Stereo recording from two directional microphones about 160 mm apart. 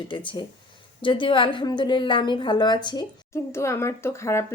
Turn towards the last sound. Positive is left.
turn(degrees=15)  # may be behind; listen again after turning